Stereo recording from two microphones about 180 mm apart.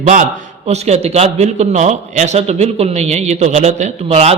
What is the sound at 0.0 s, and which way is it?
A man's voice, 45° right (ahead or behind).